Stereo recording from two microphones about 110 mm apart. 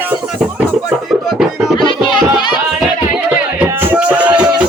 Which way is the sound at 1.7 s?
45° left (ahead or behind).